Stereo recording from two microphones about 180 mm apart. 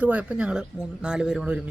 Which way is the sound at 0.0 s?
10° right (ahead or behind).